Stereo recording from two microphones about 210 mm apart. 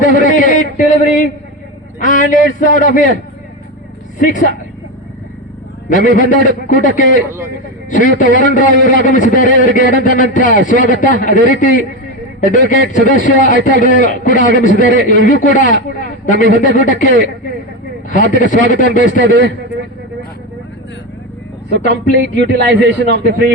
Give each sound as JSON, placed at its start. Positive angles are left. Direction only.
{"t": 0.0, "sound": "a man's voice", "side_deg": 40}
{"t": 4.2, "sound": "a man's voice", "side_deg": 40}
{"t": 5.9, "sound": "a man's voice", "side_deg": 40}
{"t": 19.2, "sound": "a man's voice", "side_deg": -55}
{"t": 22.2, "sound": "a man's voice", "side_deg": -55}